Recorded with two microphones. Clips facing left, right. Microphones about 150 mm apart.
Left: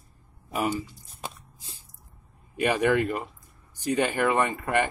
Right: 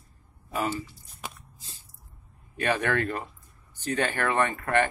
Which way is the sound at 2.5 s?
10° left (ahead or behind).